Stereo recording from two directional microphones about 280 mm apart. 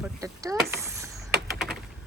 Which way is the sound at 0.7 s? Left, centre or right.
Centre.